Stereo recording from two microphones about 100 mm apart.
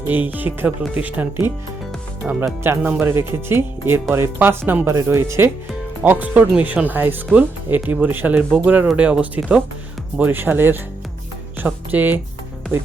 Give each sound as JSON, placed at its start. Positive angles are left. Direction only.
{"t": 0.1, "sound": "speech", "side_deg": -15}
{"t": 6.0, "sound": "speech", "side_deg": -15}